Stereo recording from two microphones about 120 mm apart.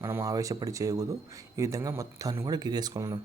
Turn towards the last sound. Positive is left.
turn(degrees=-30)  # may be behind; listen again after turning